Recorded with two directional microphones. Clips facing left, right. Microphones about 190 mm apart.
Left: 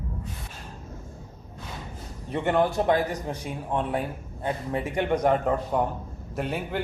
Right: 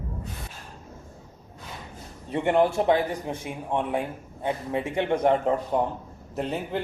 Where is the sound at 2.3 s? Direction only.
20° right (ahead or behind).